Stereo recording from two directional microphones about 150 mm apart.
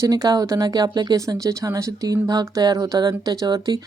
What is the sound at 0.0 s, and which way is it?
Speech, 25° right (ahead or behind).